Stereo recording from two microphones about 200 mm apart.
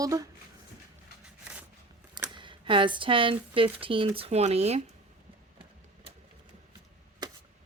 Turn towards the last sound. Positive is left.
turn(degrees=-20)  # may be behind; listen again after turning